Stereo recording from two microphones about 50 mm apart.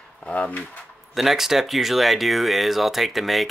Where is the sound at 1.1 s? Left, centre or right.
Centre.